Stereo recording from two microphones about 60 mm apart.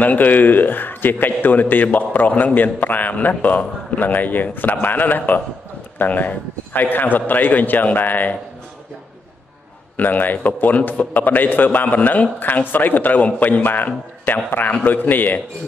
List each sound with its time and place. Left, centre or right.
0.0 s a man's voice: left
9.9 s a man's voice: left